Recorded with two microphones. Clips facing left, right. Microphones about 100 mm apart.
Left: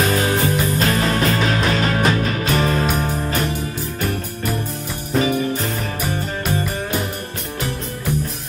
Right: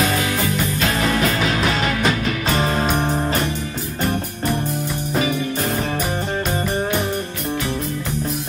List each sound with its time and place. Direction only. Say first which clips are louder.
0.0 s music: left 2 dB; 40° left (ahead or behind)
2.6 s music: left 1 dB; 30° right (ahead or behind)